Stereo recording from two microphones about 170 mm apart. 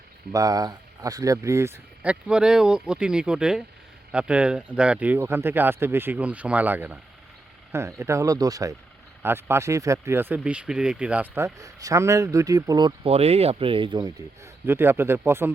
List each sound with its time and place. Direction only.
0.3 s speech: 20° right (ahead or behind)
13.1 s speech: 35° right (ahead or behind); by 15.5 s 15° right (ahead or behind)